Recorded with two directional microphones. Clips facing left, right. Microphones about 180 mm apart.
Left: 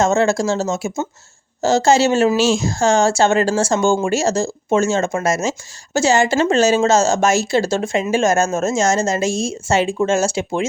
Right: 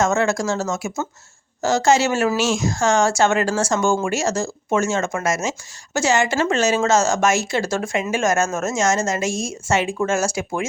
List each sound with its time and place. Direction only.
0.0 s speech: 30° left (ahead or behind)